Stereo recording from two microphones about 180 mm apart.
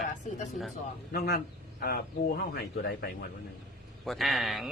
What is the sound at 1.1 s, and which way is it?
A man's voice, 60° left (ahead or behind).